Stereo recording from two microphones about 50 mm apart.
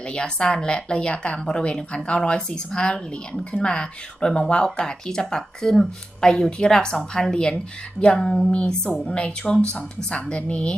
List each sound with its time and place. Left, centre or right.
0.1 s a woman's voice: centre